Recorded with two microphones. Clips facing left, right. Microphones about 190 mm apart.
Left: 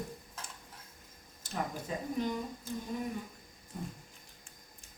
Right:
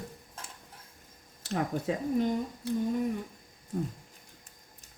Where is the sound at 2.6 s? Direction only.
70° right (ahead or behind).